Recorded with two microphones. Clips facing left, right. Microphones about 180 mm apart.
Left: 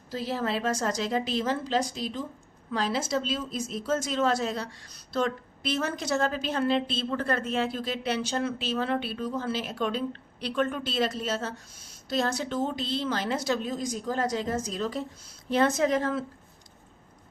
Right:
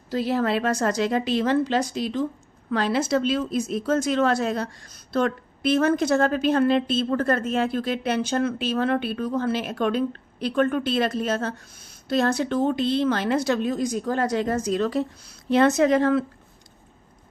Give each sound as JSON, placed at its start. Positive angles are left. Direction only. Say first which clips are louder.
{"t": 0.1, "sound": "a woman's voice", "louder": "right 7 dB", "side_deg": -70}